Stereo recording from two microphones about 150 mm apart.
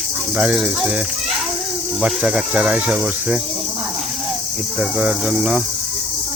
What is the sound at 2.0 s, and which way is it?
Speech, 5° right (ahead or behind).